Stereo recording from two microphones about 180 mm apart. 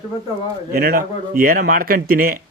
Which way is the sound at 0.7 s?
55° right (ahead or behind).